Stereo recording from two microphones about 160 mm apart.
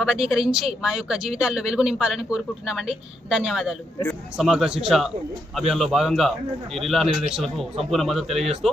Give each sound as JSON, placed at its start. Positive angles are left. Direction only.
{"t": 0.0, "sound": "a man's voice", "side_deg": -5}
{"t": 7.4, "sound": "a man's voice", "side_deg": -40}
{"t": 7.9, "sound": "a man's voice", "side_deg": 0}